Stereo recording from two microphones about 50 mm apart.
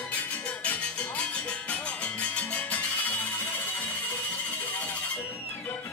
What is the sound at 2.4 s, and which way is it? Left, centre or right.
Music, left.